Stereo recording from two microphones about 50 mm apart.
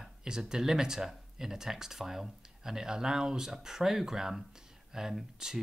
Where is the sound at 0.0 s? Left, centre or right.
Centre.